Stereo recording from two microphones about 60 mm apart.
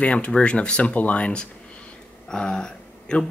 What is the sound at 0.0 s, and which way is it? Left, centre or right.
Speech, left.